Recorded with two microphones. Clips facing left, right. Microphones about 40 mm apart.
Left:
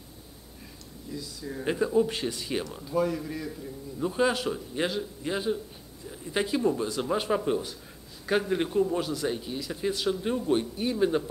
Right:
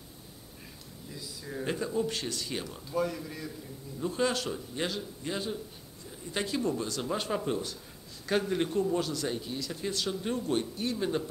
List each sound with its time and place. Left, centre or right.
1.1 s speech: centre
1.6 s a man's voice: centre